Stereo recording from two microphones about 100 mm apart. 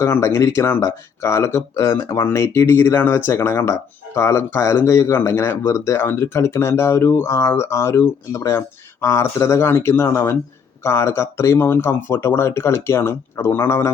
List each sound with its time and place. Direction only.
0.0 s speech: 25° left (ahead or behind)